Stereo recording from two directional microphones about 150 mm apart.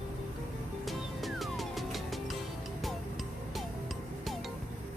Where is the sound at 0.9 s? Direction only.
Centre (ahead or behind).